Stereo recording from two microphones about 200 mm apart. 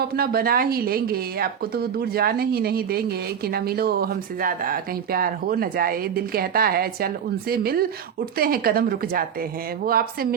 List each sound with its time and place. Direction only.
0.0 s speech: 50° right (ahead or behind)